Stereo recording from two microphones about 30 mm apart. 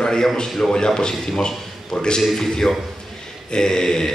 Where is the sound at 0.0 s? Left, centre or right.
Left.